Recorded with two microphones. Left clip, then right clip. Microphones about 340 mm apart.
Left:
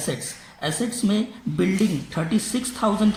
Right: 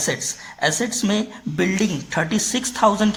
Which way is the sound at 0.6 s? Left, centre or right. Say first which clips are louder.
Right 5 dB; right.